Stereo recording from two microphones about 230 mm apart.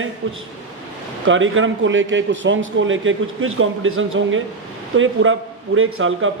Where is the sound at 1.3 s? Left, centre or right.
Right.